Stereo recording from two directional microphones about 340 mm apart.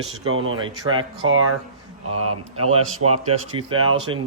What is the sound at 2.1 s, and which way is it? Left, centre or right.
Speech, right.